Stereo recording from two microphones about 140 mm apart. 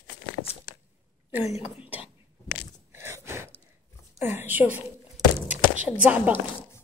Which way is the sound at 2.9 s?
20° right (ahead or behind).